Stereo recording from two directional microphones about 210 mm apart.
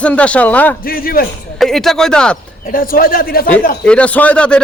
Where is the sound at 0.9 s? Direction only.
45° left (ahead or behind).